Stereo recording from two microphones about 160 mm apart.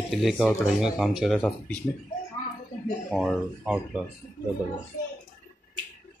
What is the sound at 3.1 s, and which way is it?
Speech, 5° left (ahead or behind).